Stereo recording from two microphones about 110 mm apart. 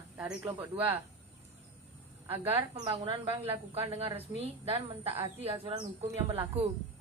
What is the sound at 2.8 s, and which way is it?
A woman's voice, 55° right (ahead or behind).